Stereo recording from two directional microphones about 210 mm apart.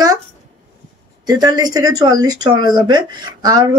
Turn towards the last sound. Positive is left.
turn(degrees=-20)  # may be behind; listen again after turning